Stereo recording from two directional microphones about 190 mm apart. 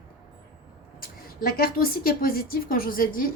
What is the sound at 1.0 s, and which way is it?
A woman's voice, 50° left (ahead or behind).